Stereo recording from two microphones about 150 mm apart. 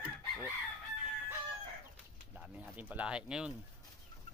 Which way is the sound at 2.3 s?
10° right (ahead or behind).